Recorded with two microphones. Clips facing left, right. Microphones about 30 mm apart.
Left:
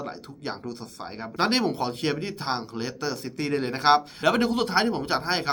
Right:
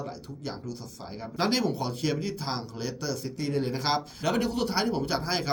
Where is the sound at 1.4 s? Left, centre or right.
Left.